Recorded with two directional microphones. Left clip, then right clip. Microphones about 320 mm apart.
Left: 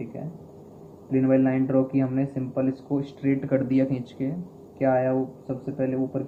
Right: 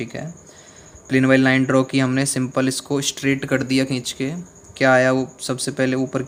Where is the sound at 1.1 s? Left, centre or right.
Right.